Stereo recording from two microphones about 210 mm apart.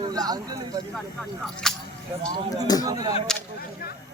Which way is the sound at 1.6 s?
5° left (ahead or behind).